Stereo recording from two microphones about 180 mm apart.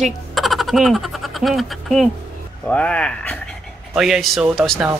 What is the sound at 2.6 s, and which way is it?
Speech, 5° left (ahead or behind).